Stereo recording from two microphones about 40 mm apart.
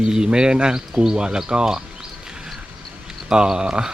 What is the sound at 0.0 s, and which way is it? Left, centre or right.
Speech, centre.